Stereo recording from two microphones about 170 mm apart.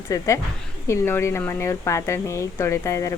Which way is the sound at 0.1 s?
20° left (ahead or behind).